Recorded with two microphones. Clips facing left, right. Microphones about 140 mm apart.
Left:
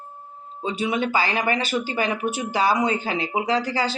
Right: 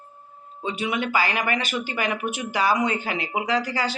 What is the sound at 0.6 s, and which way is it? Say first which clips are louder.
Speech: left 2 dB; 30° left (ahead or behind).